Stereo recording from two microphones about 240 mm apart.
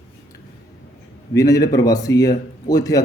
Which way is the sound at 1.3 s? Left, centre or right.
Centre.